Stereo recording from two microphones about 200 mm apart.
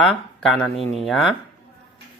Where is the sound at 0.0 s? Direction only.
Centre (ahead or behind).